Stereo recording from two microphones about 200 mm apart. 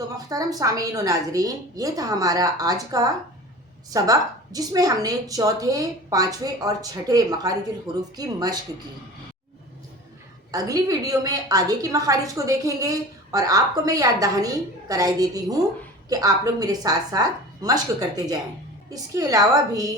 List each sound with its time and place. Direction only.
0.3 s a woman's voice: 20° right (ahead or behind)
10.5 s a woman's voice: 20° right (ahead or behind)